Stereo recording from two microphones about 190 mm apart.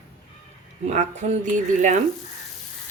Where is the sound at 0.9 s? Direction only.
35° right (ahead or behind).